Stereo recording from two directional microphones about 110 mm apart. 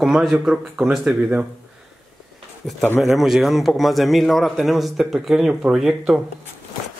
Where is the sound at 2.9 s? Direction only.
Centre (ahead or behind).